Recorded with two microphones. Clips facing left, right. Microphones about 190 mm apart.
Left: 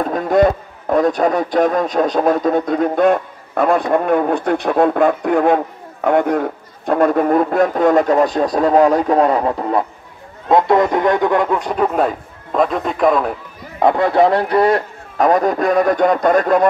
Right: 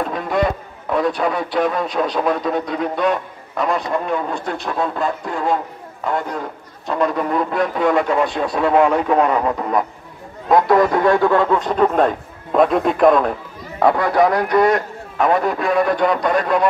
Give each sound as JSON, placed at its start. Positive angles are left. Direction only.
{"t": 0.0, "sound": "a man's voice", "side_deg": 45}
{"t": 13.7, "sound": "speech", "side_deg": 20}